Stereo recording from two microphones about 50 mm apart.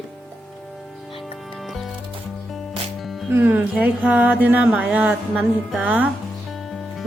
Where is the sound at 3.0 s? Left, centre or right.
Centre.